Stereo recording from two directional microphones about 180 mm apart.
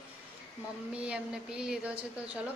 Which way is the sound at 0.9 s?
5° right (ahead or behind).